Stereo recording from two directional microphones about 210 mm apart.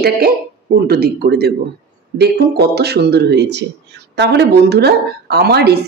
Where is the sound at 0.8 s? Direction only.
50° right (ahead or behind).